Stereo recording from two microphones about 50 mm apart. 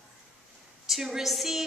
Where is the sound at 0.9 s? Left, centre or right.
Centre.